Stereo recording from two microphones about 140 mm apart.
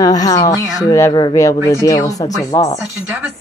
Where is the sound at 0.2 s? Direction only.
25° left (ahead or behind).